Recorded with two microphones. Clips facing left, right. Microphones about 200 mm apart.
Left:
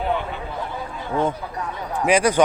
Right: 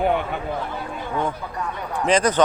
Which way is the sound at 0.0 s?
55° right (ahead or behind).